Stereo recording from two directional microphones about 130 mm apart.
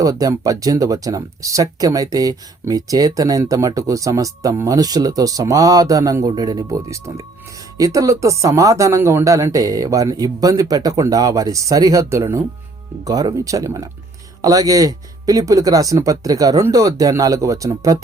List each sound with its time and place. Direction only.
0.0 s speech: 25° right (ahead or behind)